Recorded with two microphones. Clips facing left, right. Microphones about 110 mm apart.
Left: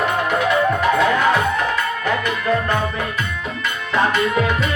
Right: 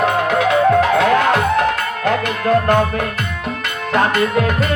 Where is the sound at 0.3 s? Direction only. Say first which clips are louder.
Right 6 dB; 85° right; by 2.7 s 65° right (ahead or behind).